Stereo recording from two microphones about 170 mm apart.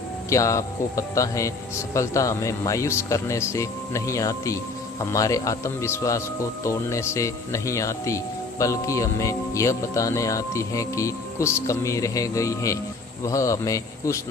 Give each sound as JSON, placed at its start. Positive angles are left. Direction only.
{"t": 0.3, "sound": "speech", "side_deg": 20}